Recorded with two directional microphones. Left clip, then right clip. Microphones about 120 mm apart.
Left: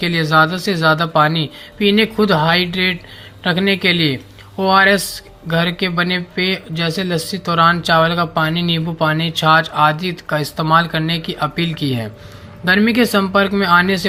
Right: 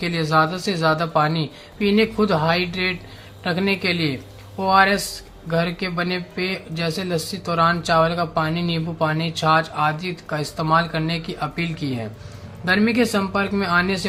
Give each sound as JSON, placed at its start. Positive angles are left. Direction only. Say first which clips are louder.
{"t": 0.0, "sound": "speech", "louder": "left 5 dB", "side_deg": 20}